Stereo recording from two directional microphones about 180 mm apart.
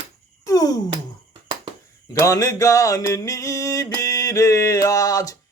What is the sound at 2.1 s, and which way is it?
Speech, 20° left (ahead or behind).